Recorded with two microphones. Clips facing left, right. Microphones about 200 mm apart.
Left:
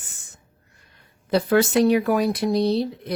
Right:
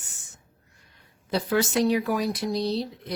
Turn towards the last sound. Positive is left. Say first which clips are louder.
# left 6 dB
turn(degrees=60)  # may be behind; listen again after turning